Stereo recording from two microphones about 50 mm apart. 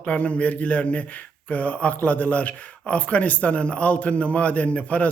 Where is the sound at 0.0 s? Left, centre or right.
Left.